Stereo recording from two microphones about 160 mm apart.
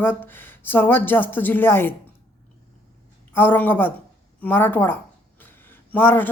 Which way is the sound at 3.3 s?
10° left (ahead or behind).